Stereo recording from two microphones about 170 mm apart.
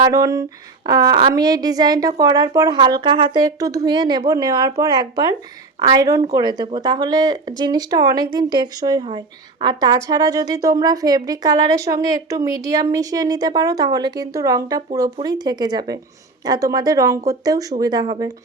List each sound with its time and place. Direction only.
0.0 s speech: 20° right (ahead or behind)